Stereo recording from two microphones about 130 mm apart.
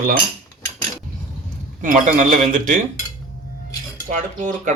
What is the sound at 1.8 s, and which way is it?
Speech, 75° right (ahead or behind).